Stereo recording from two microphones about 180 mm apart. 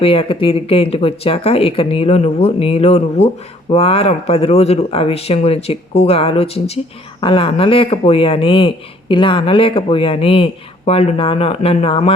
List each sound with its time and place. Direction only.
0.0 s speech: 30° left (ahead or behind)